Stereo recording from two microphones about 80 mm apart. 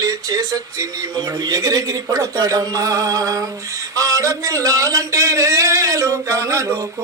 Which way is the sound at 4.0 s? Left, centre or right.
Right.